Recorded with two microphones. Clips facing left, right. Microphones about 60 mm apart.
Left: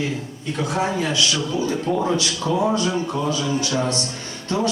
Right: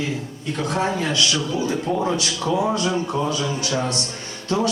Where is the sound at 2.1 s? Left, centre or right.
Right.